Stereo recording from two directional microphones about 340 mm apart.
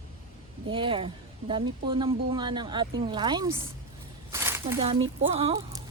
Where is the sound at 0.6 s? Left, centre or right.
Centre.